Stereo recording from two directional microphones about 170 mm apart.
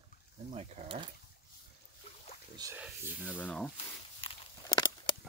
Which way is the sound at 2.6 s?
15° right (ahead or behind).